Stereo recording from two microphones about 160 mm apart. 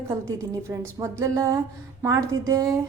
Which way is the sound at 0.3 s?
15° right (ahead or behind).